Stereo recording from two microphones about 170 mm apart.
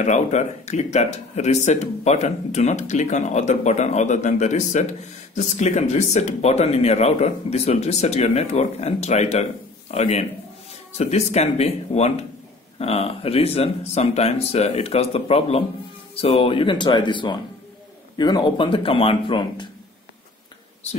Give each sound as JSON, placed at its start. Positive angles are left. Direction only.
{"t": 0.0, "sound": "speech", "side_deg": 45}